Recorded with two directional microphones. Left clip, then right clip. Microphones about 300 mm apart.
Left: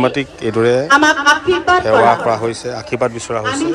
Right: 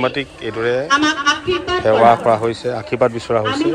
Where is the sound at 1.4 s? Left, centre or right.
Left.